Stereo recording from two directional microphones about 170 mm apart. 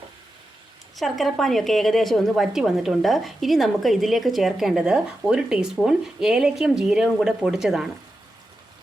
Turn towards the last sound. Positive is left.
turn(degrees=0)  # may be behind; listen again after turning